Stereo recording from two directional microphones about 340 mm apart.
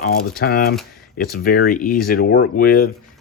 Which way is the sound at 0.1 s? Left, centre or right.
Left.